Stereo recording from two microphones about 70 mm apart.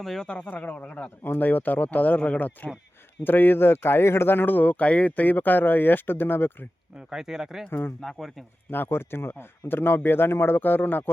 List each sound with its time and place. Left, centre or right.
0.0 s speech: centre
0.3 s speech: centre
0.5 s speech: left
1.2 s speech: left
7.1 s speech: centre
7.7 s a man's voice: left
8.0 s speech: centre
8.7 s a man's voice: left